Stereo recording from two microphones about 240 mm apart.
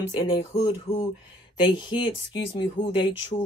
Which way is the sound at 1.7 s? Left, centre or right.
Centre.